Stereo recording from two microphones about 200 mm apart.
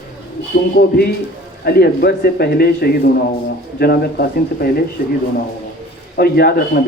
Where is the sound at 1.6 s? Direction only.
50° left (ahead or behind).